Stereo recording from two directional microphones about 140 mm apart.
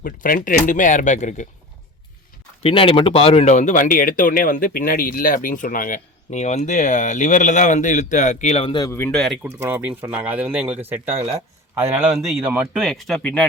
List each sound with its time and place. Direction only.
0.0 s speech: 85° left; by 1.5 s 60° left (ahead or behind)
2.6 s speech: 40° left (ahead or behind)
8.9 s speech: 15° left (ahead or behind)
9.1 s speech: centre (ahead or behind)
9.4 s a man's voice: 15° right (ahead or behind); by 13.5 s 10° left (ahead or behind)